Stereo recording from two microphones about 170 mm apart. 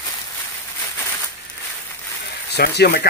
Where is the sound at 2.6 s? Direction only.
65° left (ahead or behind).